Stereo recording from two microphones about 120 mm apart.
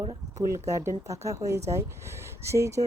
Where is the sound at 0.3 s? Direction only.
25° right (ahead or behind).